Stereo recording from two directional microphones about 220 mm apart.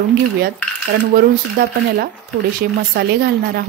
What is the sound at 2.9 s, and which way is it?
Speech, 45° right (ahead or behind).